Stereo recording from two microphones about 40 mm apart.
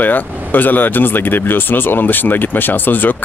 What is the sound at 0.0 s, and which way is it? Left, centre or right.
Speech, left.